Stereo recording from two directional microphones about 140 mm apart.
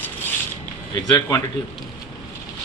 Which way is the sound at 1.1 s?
25° left (ahead or behind).